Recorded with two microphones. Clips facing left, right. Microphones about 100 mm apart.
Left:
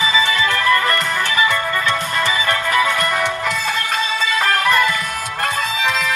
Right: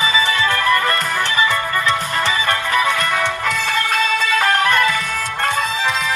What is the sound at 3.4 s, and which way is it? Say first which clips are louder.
Music: right 1 dB; centre (ahead or behind).